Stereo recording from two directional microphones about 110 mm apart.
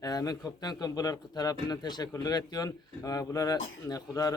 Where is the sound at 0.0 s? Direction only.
35° left (ahead or behind).